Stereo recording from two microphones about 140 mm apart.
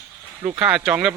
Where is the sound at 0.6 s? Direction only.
10° right (ahead or behind).